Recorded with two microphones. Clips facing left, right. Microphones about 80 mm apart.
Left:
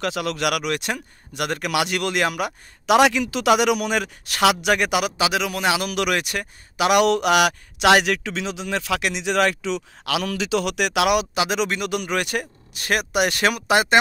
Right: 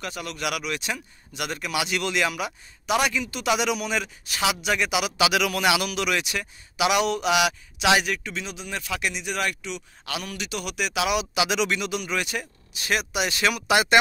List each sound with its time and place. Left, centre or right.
0.0 s speech: left
3.0 s speech: left
5.1 s speech: left
5.9 s speech: left
7.1 s a man's voice: left
11.3 s speech: left